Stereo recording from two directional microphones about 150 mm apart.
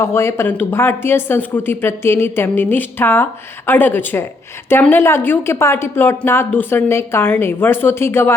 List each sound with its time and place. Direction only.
0.0 s a woman's voice: 15° left (ahead or behind)